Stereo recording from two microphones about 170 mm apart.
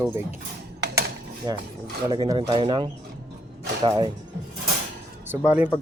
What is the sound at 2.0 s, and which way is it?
Speech, 25° right (ahead or behind).